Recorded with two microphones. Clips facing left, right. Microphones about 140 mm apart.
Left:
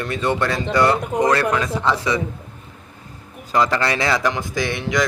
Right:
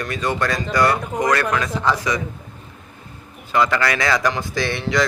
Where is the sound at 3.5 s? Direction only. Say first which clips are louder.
Even; 35° left (ahead or behind); by 5.1 s 15° left (ahead or behind).